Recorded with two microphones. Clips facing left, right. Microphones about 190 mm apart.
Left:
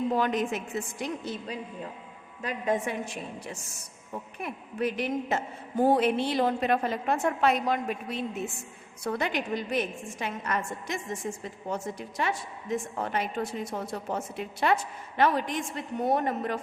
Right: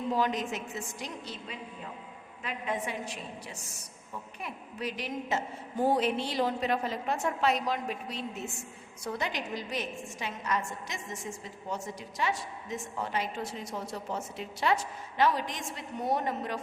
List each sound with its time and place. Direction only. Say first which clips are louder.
0.2 s a woman's voice: left 3 dB; 55° left (ahead or behind)